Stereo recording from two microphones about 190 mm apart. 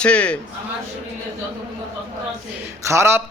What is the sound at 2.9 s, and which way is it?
Speech, 15° right (ahead or behind).